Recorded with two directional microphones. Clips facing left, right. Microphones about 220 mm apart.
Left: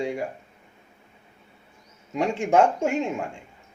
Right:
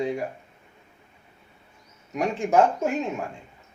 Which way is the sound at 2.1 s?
25° left (ahead or behind).